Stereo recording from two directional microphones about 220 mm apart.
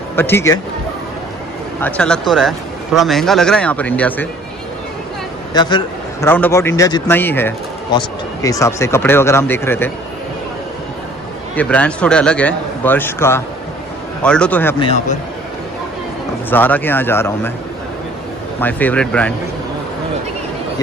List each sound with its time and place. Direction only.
0.1 s speech: 10° left (ahead or behind)
1.8 s speech: 5° left (ahead or behind)
5.5 s a man's voice: 20° left (ahead or behind)
6.3 s speech: 10° left (ahead or behind)
11.5 s speech: 5° left (ahead or behind)
14.8 s a man's voice: 25° left (ahead or behind)
16.4 s speech: 10° left (ahead or behind)
18.6 s speech: 10° left (ahead or behind)